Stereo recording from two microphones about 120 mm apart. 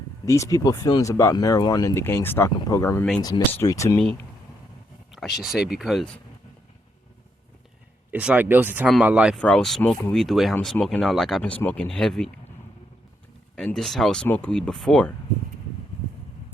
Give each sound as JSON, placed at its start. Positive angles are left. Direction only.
{"t": 0.3, "sound": "speech", "side_deg": 25}
{"t": 2.0, "sound": "speech", "side_deg": 20}
{"t": 3.9, "sound": "speech", "side_deg": 15}
{"t": 5.1, "sound": "speech", "side_deg": 0}
{"t": 8.1, "sound": "speech", "side_deg": -10}
{"t": 9.4, "sound": "speech", "side_deg": 5}
{"t": 13.7, "sound": "speech", "side_deg": 0}